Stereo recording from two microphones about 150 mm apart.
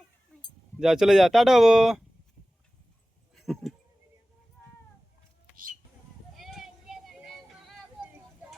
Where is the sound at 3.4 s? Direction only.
Centre (ahead or behind).